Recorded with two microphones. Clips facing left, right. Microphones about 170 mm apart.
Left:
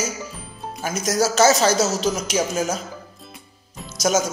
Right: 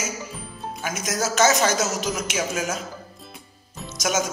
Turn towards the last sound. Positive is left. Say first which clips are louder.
# left 4 dB
turn(degrees=40)  # may be behind; listen again after turning